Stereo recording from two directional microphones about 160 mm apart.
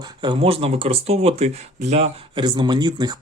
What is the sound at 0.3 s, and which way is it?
Speech, 35° right (ahead or behind).